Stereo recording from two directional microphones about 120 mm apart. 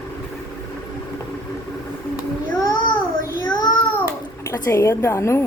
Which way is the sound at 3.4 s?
35° left (ahead or behind).